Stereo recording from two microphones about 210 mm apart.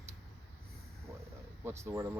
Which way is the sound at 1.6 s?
10° right (ahead or behind).